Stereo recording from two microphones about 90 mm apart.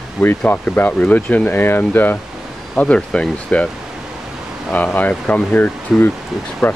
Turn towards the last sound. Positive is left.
turn(degrees=20)  # may be behind; listen again after turning